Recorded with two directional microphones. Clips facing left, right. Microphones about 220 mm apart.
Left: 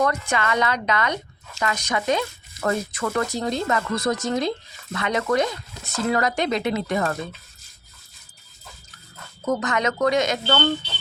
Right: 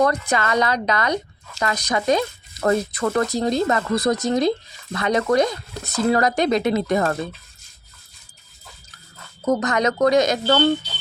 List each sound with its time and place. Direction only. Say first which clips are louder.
0.0 s speech: right 3 dB; 35° right (ahead or behind)
9.5 s speech: right 3 dB; 40° right (ahead or behind)